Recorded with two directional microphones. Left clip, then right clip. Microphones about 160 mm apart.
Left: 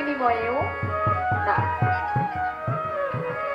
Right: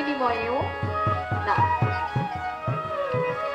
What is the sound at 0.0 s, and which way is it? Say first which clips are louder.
Music: left 2 dB; 15° left (ahead or behind).